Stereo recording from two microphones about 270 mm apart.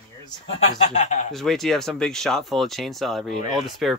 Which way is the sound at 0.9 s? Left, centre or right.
Left.